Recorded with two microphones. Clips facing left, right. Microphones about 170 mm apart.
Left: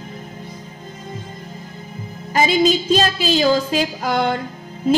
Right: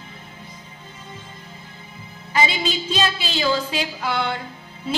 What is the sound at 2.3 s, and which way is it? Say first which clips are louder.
A woman's voice: left 7 dB; 45° left (ahead or behind).